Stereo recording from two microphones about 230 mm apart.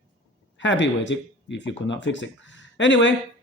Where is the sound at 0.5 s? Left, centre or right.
Left.